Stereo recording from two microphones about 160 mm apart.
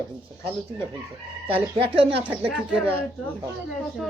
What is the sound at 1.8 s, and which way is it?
Speech, 35° right (ahead or behind).